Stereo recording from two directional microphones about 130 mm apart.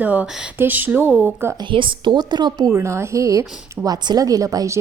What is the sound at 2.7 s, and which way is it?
A woman's voice, 20° right (ahead or behind).